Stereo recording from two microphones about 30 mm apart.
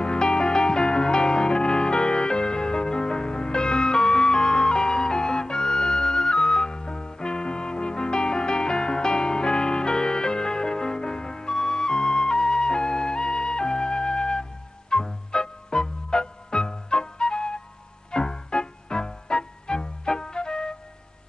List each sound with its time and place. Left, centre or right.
0.0 s music: left